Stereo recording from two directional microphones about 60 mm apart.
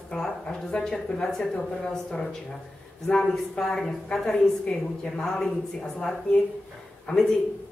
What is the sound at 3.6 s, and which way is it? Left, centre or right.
Speech, centre.